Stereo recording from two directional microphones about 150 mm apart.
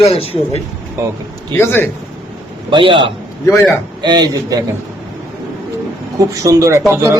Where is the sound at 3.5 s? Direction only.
20° left (ahead or behind).